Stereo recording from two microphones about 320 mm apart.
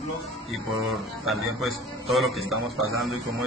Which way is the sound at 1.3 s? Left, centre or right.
Centre.